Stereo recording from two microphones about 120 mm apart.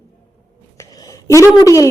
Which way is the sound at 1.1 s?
25° left (ahead or behind).